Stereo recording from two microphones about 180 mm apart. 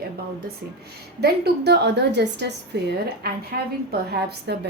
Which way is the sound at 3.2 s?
55° right (ahead or behind).